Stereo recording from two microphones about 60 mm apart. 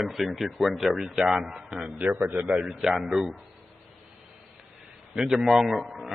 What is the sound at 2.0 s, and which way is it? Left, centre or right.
Speech, right.